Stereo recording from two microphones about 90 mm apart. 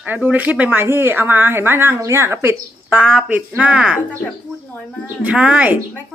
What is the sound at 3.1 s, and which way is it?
Speech, 10° right (ahead or behind).